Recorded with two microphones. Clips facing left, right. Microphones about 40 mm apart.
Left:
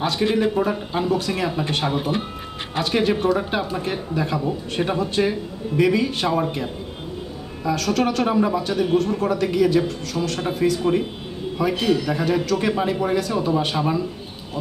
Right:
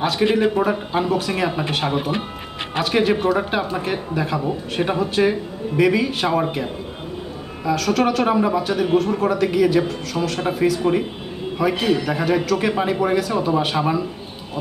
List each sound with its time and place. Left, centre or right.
0.2 s a man's voice: right
0.6 s speech: centre
7.6 s speech: centre